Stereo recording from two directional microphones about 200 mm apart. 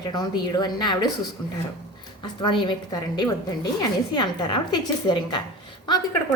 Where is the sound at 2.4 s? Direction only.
25° left (ahead or behind).